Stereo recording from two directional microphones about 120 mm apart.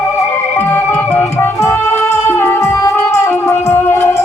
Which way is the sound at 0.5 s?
20° left (ahead or behind).